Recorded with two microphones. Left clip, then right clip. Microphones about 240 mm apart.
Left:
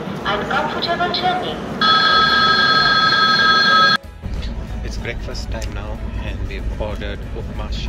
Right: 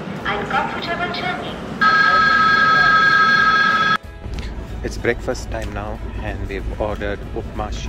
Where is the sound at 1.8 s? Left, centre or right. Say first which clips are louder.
Even; centre.